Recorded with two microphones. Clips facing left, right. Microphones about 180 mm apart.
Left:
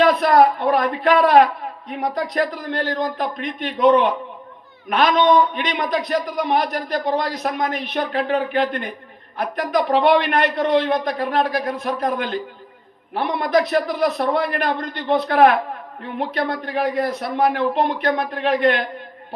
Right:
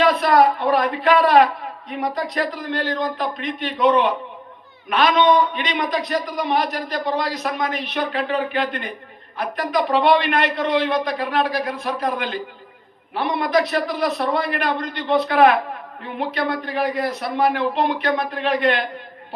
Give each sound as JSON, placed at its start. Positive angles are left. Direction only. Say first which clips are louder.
{"t": 0.0, "sound": "a man's voice", "louder": "left 1 dB", "side_deg": 50}